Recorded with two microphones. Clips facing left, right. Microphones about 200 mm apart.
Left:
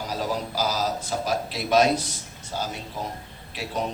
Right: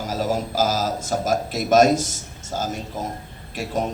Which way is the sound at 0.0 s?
45° right (ahead or behind).